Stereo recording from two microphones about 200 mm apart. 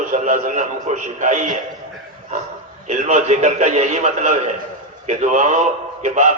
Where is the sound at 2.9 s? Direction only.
35° right (ahead or behind).